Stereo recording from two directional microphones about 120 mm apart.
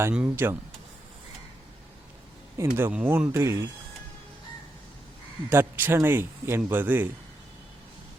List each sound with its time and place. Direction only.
0.1 s a man's voice: 15° right (ahead or behind)
2.6 s speech: 20° right (ahead or behind)
5.5 s a man's voice: 20° right (ahead or behind)